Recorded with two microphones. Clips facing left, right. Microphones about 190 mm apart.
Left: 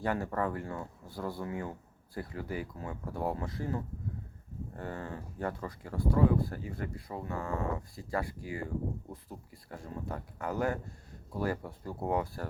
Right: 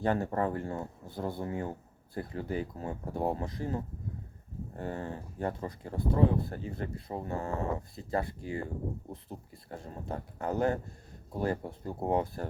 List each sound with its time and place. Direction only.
0.0 s speech: 25° right (ahead or behind)
7.9 s speech: 25° right (ahead or behind)